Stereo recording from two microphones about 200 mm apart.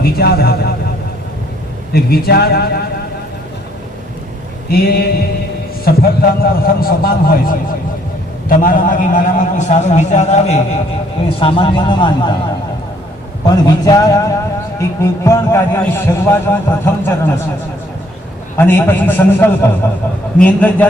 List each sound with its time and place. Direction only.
0.0 s a man's voice: 50° left (ahead or behind)
1.9 s a man's voice: 50° left (ahead or behind)
4.7 s a man's voice: 50° left (ahead or behind); by 12.3 s 25° left (ahead or behind)
13.4 s a man's voice: 20° left (ahead or behind)
18.5 s a man's voice: 10° left (ahead or behind)